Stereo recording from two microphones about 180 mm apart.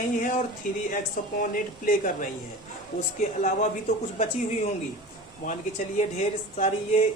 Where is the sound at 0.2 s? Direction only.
45° left (ahead or behind).